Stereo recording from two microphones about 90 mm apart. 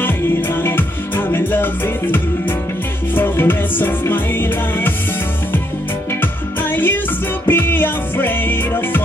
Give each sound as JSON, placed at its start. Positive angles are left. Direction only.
{"t": 0.0, "sound": "music", "side_deg": 25}
{"t": 6.2, "sound": "music", "side_deg": 20}